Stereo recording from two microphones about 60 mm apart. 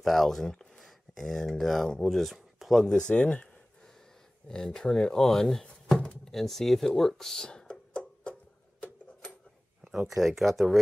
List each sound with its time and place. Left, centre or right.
0.0 s speech: centre
2.9 s speech: centre
4.5 s speech: centre
8.0 s a sound: centre
9.8 s speech: centre